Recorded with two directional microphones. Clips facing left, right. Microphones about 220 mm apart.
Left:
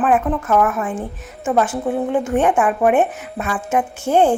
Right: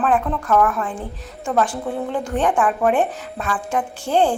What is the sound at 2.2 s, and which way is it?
A woman's voice, 5° left (ahead or behind).